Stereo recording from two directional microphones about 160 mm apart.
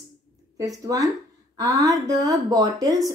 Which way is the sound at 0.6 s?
20° right (ahead or behind).